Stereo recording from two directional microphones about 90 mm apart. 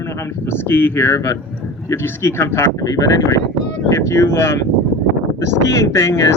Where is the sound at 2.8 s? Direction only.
40° left (ahead or behind).